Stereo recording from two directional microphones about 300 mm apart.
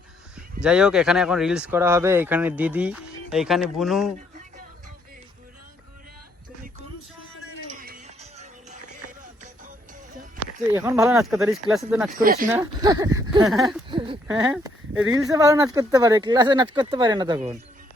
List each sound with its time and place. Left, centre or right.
0.6 s speech: centre
7.7 s music: right
10.8 s speech: centre
12.2 s speech: right
12.5 s speech: centre
13.6 s speech: centre
13.9 s a sound: centre
14.3 s speech: centre